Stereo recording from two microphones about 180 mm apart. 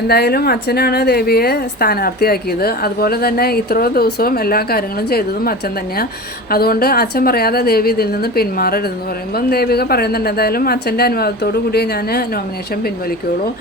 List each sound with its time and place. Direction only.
0.1 s a woman's voice: 60° left (ahead or behind)